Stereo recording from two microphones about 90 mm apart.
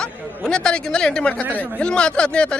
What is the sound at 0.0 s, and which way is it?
Speech, 10° left (ahead or behind).